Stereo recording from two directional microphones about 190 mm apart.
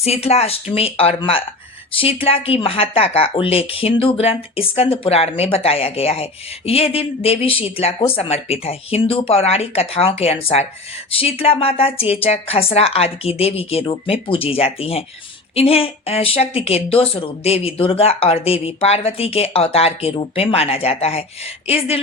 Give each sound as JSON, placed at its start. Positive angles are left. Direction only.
{"t": 0.0, "sound": "speech", "side_deg": 35}